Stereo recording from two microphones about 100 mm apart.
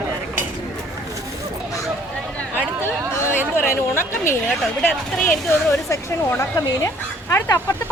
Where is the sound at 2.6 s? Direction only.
25° left (ahead or behind).